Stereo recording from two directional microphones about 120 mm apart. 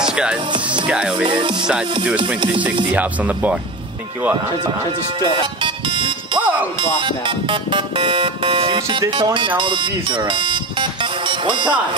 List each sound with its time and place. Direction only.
0.1 s music: 5° right (ahead or behind)
0.8 s speech: 10° right (ahead or behind)
1.2 s music: 40° right (ahead or behind)
2.9 s speech: 10° right (ahead or behind)
5.2 s music: 40° right (ahead or behind)
7.0 s speech: 45° right (ahead or behind)